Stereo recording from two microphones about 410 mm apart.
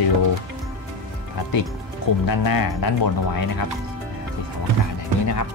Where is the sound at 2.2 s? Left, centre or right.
Left.